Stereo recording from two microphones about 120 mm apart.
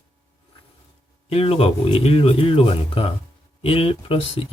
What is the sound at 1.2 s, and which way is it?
Speech, 55° left (ahead or behind).